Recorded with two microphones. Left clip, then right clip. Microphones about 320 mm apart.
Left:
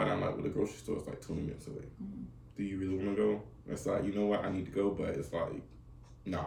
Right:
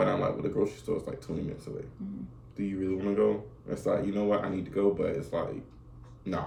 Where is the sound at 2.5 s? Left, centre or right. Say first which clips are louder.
Right 5 dB; centre.